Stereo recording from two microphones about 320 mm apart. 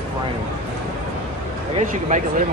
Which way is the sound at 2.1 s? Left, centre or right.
Right.